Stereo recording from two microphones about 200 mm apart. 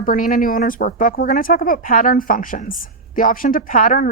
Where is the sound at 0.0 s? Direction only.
45° left (ahead or behind).